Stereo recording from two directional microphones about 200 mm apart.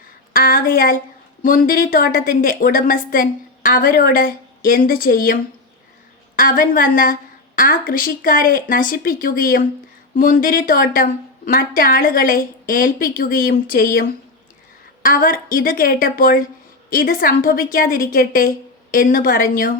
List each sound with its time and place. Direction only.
0.3 s a woman's voice: 45° left (ahead or behind)
15.0 s a woman's voice: 45° left (ahead or behind)